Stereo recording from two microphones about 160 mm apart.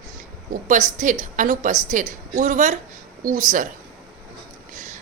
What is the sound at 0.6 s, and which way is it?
A woman's voice, 50° right (ahead or behind).